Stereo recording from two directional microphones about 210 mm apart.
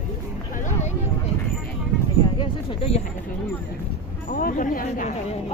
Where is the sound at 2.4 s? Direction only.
30° left (ahead or behind).